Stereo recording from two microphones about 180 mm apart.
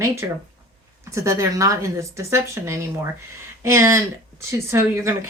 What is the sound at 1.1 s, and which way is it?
Speech, 15° right (ahead or behind).